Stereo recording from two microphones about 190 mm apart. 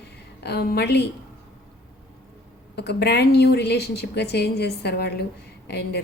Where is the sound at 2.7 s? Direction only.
60° left (ahead or behind).